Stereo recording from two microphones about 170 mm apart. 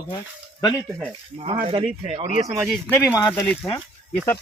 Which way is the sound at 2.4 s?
15° right (ahead or behind).